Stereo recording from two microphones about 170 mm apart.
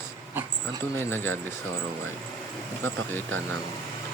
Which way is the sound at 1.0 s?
15° left (ahead or behind).